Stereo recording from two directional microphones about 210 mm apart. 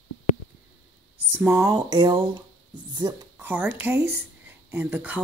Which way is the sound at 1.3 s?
10° right (ahead or behind).